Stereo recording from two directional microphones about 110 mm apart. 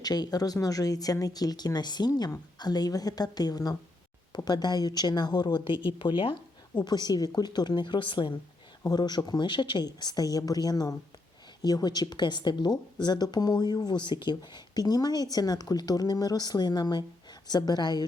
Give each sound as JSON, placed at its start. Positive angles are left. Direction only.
{"t": 0.0, "sound": "speech", "side_deg": 35}
{"t": 8.8, "sound": "speech", "side_deg": 35}